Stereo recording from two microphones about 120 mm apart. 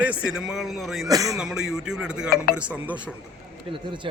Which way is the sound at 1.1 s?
30° right (ahead or behind).